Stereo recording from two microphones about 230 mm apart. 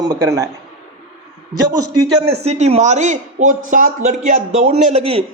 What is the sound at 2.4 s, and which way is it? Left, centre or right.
A man's voice, right.